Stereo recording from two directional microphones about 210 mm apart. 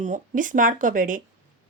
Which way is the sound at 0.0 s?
35° right (ahead or behind).